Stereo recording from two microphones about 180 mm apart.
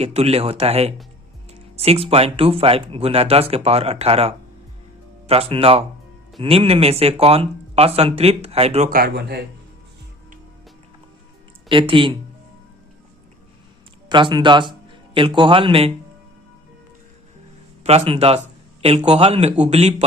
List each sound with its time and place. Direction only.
0.0 s speech: 35° right (ahead or behind)
8.9 s speech: 60° right (ahead or behind)
11.7 s speech: 30° right (ahead or behind)
14.1 s a man's voice: 25° right (ahead or behind)
17.8 s speech: 35° right (ahead or behind)